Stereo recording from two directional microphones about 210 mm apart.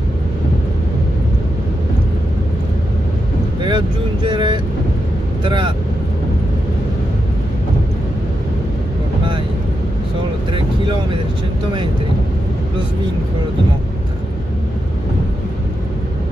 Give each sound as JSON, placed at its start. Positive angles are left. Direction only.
{"t": 3.6, "sound": "vehicle", "side_deg": -20}
{"t": 5.4, "sound": "speech", "side_deg": -20}